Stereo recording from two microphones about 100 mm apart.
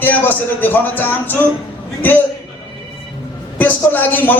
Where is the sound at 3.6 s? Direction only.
15° left (ahead or behind).